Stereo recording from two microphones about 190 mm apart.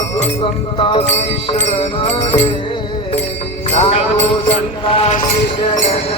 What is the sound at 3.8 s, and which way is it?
Music, 30° left (ahead or behind).